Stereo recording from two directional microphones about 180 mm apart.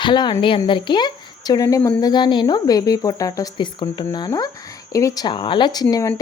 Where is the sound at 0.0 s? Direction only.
25° left (ahead or behind).